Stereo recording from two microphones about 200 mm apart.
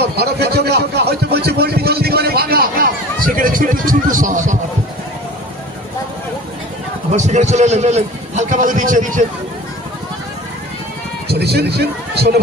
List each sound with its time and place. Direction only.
0.0 s a sound: 55° right (ahead or behind)
7.1 s a man's voice: 35° right (ahead or behind)
11.2 s a man's voice: 55° right (ahead or behind)